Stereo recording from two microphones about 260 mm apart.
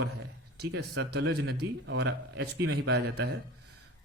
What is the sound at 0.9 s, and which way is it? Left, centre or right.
Speech, right.